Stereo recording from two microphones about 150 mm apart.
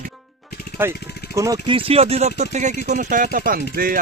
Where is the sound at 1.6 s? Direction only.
35° right (ahead or behind).